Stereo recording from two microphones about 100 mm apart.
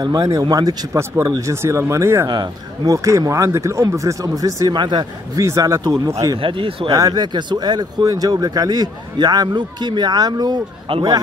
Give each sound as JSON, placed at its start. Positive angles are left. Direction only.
{"t": 0.0, "sound": "speech", "side_deg": -40}
{"t": 1.5, "sound": "speech", "side_deg": -30}
{"t": 2.2, "sound": "speech", "side_deg": -45}
{"t": 4.7, "sound": "speech", "side_deg": -50}
{"t": 5.3, "sound": "speech", "side_deg": -35}
{"t": 6.3, "sound": "speech", "side_deg": -60}
{"t": 6.9, "sound": "speech", "side_deg": -40}
{"t": 10.9, "sound": "a man's voice", "side_deg": -75}